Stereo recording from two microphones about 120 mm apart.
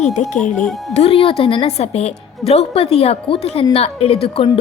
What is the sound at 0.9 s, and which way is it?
A woman's voice, 60° left (ahead or behind).